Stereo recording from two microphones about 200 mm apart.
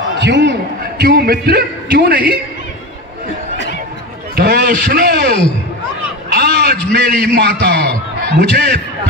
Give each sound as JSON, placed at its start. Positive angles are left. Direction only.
{"t": 0.2, "sound": "a man's voice", "side_deg": -60}
{"t": 4.4, "sound": "a man's voice", "side_deg": -50}
{"t": 6.3, "sound": "a sound", "side_deg": -55}
{"t": 6.9, "sound": "a man's voice", "side_deg": -55}